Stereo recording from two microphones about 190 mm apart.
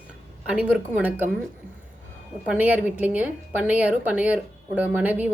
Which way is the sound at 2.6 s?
10° right (ahead or behind).